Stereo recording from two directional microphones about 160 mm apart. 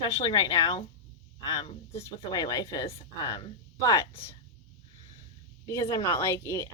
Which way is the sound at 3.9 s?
20° left (ahead or behind).